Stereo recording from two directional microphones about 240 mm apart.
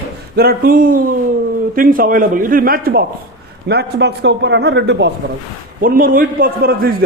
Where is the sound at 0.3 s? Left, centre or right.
Right.